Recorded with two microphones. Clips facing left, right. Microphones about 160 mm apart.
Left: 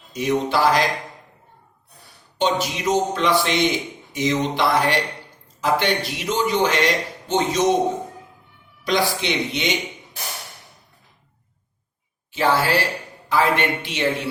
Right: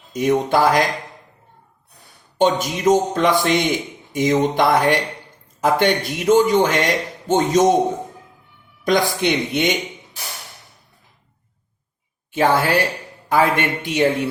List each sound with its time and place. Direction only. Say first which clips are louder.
0.1 s a man's voice: right 4 dB; 50° right (ahead or behind)
2.4 s a man's voice: right 4 dB; 50° right (ahead or behind)
8.8 s a man's voice: right 4 dB; 50° right (ahead or behind)
12.3 s a man's voice: right 3 dB; 50° right (ahead or behind)